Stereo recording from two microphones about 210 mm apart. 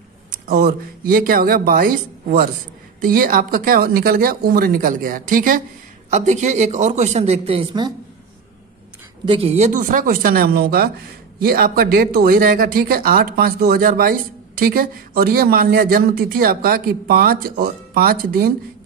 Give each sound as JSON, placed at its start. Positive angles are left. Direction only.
{"t": 0.5, "sound": "a man's voice", "side_deg": -45}
{"t": 9.2, "sound": "speech", "side_deg": -25}